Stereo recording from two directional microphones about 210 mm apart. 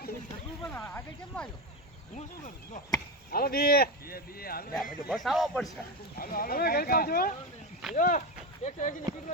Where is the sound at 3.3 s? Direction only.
45° left (ahead or behind).